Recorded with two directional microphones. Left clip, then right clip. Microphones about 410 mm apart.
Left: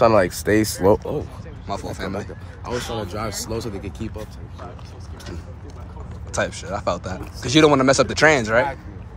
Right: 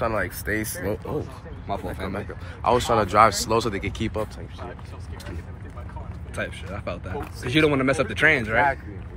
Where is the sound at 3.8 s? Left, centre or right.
Centre.